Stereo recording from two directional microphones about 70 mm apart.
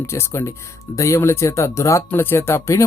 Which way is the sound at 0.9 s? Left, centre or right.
Left.